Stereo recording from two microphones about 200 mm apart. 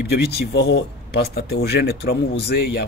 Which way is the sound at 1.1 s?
50° left (ahead or behind).